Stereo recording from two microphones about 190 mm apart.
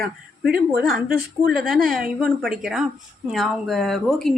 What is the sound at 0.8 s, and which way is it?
Speech, centre (ahead or behind).